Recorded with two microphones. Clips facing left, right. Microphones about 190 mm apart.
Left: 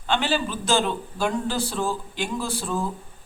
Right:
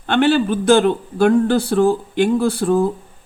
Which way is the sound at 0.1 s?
60° right (ahead or behind).